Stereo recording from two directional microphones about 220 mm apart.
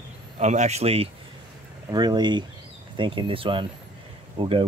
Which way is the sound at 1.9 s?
20° right (ahead or behind).